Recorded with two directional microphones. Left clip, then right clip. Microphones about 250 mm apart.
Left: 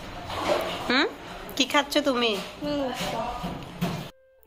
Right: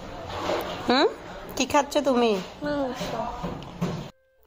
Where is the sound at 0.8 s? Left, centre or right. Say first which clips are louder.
Right 5 dB; right.